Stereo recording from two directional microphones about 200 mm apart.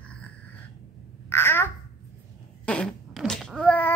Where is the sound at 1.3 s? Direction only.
10° left (ahead or behind).